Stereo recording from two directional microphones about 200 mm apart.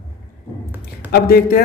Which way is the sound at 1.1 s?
50° left (ahead or behind).